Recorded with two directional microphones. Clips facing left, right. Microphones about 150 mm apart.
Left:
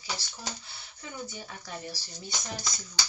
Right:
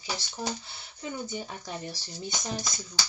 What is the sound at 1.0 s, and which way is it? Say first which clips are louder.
Speech: right 5 dB; 20° right (ahead or behind).